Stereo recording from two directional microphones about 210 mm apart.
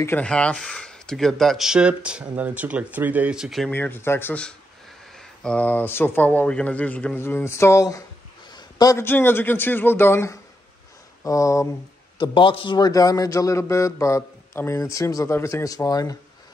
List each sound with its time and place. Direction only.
0.0 s speech: 5° left (ahead or behind)
3.7 s a man's voice: 10° left (ahead or behind)